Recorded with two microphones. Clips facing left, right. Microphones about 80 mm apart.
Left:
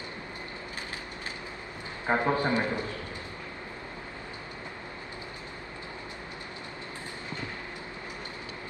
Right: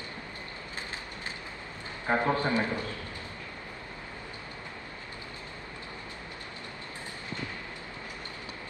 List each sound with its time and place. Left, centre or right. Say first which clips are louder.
2.0 s a man's voice: left 1 dB; centre